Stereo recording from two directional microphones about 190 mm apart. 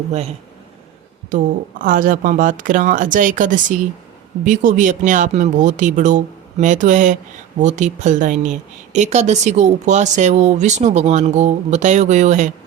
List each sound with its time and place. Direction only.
0.1 s speech: 35° right (ahead or behind)